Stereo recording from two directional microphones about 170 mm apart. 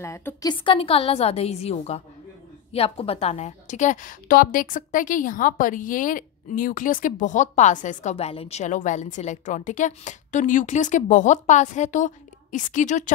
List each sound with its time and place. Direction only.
0.0 s a woman's voice: 15° left (ahead or behind); by 13.1 s 45° left (ahead or behind)